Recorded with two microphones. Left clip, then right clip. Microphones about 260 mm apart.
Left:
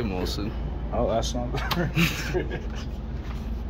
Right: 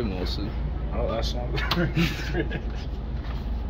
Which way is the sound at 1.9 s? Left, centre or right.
Centre.